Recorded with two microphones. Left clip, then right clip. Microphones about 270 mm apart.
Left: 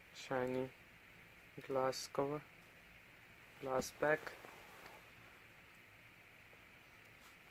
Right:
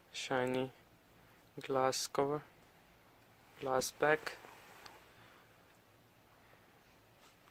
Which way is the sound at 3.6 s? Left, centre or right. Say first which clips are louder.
Right 5 dB; right.